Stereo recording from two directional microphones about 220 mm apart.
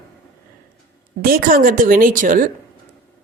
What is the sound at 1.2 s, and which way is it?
Speech, 40° right (ahead or behind).